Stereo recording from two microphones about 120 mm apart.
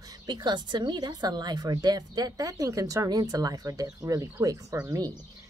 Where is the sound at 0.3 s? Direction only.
40° right (ahead or behind).